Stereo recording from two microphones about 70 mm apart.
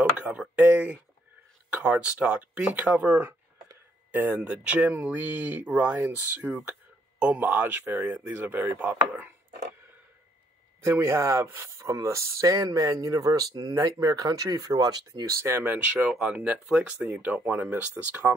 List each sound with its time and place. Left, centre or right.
0.6 s speech: right
10.8 s speech: right
15.2 s speech: right
16.1 s speech: centre